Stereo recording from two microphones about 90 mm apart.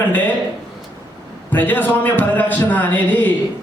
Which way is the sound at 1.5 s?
20° left (ahead or behind).